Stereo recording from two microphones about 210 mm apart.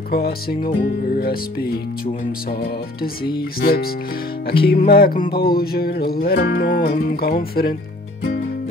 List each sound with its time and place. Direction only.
0.1 s music: 45° left (ahead or behind)
3.6 s music: 45° left (ahead or behind)